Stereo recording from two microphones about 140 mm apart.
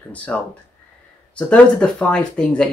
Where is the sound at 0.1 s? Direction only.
10° left (ahead or behind).